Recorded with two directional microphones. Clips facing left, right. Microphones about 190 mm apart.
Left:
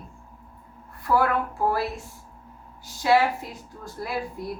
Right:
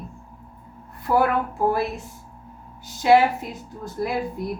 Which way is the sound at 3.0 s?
20° right (ahead or behind).